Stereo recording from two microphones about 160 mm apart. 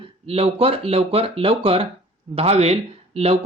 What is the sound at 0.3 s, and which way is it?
Speech, 35° right (ahead or behind).